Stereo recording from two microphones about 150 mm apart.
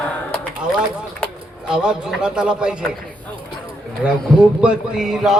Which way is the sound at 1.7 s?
5° right (ahead or behind).